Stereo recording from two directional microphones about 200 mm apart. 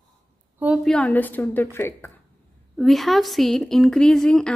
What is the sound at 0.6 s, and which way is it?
Speech, 5° right (ahead or behind).